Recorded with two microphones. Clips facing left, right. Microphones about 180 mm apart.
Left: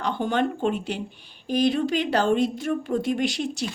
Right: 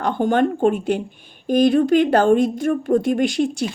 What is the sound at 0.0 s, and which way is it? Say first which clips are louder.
Speech: right 6 dB; 50° right (ahead or behind).